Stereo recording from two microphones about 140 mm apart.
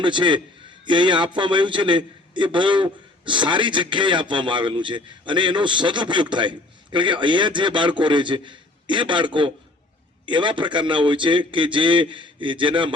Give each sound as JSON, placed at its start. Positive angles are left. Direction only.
{"t": 0.0, "sound": "a man's voice", "side_deg": -35}